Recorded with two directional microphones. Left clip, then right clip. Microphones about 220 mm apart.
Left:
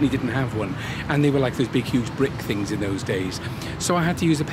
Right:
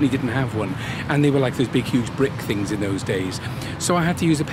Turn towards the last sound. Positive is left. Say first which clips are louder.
# right 1 dB
turn(degrees=0)  # may be behind; listen again after turning